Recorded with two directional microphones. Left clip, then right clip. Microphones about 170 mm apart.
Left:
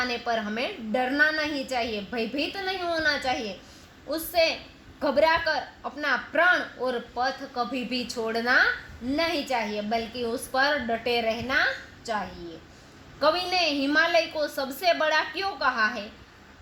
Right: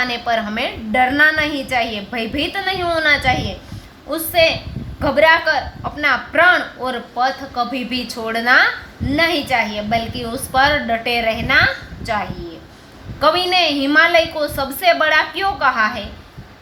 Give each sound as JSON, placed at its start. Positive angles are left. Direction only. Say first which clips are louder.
{"t": 0.0, "sound": "a woman's voice", "louder": "right 9 dB", "side_deg": 50}
{"t": 13.1, "sound": "a woman's voice", "louder": "right 9 dB", "side_deg": 50}